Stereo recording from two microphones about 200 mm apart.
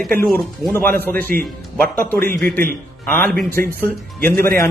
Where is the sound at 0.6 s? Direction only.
10° left (ahead or behind).